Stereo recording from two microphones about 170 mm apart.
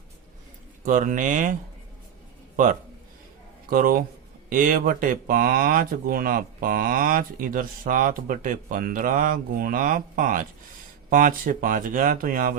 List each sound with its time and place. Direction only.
0.9 s speech: 50° right (ahead or behind)
3.7 s a man's voice: 60° right (ahead or behind)